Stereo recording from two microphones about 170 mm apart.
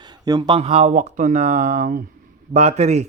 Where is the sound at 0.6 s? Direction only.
40° right (ahead or behind).